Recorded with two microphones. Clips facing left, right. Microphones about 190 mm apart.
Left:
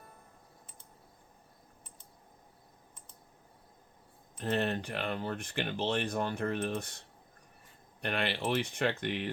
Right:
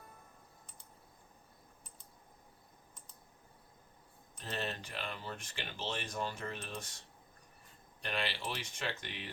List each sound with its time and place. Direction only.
4.4 s speech: 55° left (ahead or behind)
8.0 s speech: 60° left (ahead or behind)